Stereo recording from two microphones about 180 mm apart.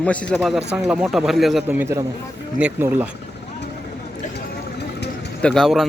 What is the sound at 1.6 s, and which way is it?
Speech, 10° right (ahead or behind).